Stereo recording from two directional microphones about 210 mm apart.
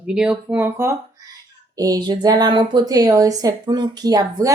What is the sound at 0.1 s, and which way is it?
A woman's voice, 5° right (ahead or behind).